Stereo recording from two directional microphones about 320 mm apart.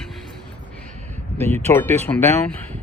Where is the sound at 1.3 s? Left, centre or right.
Centre.